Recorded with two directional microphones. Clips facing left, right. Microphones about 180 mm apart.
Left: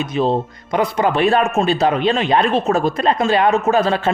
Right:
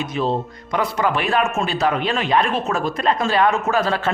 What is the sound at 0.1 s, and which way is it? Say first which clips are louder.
Speech: left 4 dB; 25° left (ahead or behind).